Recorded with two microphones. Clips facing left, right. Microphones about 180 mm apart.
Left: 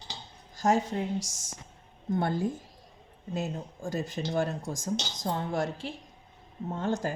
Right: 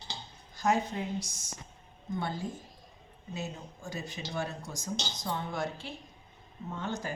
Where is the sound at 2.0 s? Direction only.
55° left (ahead or behind).